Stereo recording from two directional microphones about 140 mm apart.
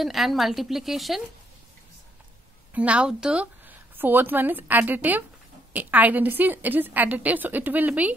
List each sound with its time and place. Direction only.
0.0 s speech: centre (ahead or behind)
2.7 s a woman's voice: 10° right (ahead or behind)